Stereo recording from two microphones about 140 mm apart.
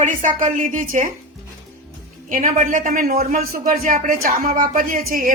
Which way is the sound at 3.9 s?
75° right (ahead or behind).